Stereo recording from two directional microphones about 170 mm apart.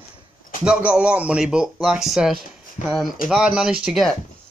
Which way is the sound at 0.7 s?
5° right (ahead or behind).